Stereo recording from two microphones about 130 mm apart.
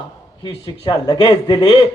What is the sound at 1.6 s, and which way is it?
Speech, 40° left (ahead or behind).